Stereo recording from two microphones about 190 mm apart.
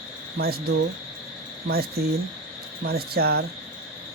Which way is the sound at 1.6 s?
55° right (ahead or behind).